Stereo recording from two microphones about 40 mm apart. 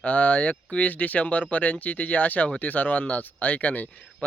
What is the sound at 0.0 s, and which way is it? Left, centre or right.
Speech, left.